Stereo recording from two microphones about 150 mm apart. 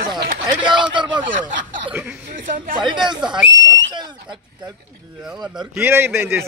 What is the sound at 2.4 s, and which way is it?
Speech, 65° right (ahead or behind).